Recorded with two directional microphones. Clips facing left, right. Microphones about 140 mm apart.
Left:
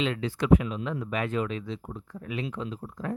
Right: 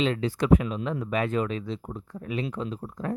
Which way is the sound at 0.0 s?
35° right (ahead or behind).